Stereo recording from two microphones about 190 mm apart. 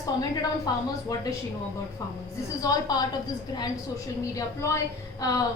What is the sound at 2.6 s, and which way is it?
A woman's voice, 20° left (ahead or behind).